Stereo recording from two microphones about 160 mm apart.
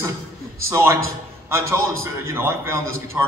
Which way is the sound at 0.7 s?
15° right (ahead or behind).